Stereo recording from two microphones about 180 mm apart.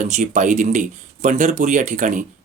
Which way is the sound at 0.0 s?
45° right (ahead or behind).